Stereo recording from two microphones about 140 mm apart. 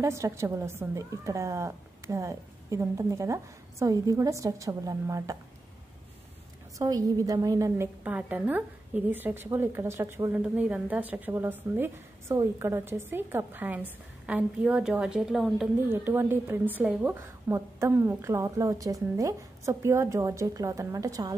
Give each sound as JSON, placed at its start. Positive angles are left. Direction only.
{"t": 0.0, "sound": "a woman's voice", "side_deg": -20}
{"t": 6.8, "sound": "a woman's voice", "side_deg": -25}
{"t": 15.9, "sound": "a woman's voice", "side_deg": -15}